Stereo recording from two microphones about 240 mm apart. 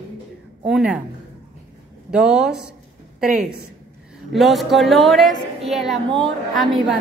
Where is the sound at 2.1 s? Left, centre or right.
Centre.